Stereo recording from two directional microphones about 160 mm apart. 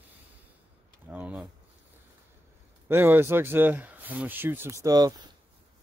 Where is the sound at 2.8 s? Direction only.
15° right (ahead or behind).